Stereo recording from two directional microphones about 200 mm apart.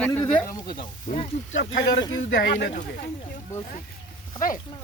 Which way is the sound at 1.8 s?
60° left (ahead or behind).